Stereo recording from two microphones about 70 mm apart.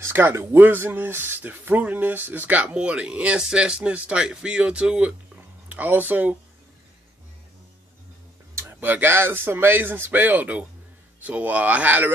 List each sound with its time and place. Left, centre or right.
0.0 s a sound: right
0.3 s speech: right
0.6 s speech: right
5.7 s speech: right
8.8 s speech: right